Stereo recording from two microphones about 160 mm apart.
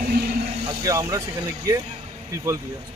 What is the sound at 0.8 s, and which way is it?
Speech, 20° right (ahead or behind).